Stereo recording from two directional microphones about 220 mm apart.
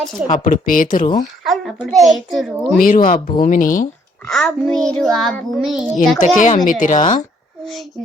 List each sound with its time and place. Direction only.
0.3 s speech: 35° left (ahead or behind)
1.5 s a child's voice: centre (ahead or behind)
2.7 s speech: 40° left (ahead or behind)
4.3 s a child's voice: centre (ahead or behind)
6.1 s speech: 35° left (ahead or behind)
7.6 s a child's voice: centre (ahead or behind)